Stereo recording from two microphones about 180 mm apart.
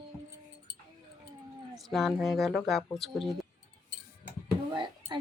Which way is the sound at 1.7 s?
Centre (ahead or behind).